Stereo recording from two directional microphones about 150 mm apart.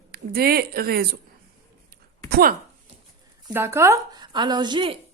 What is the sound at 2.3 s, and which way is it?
Speech, 70° right (ahead or behind).